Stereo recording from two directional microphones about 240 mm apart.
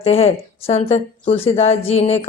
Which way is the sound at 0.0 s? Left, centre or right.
Left.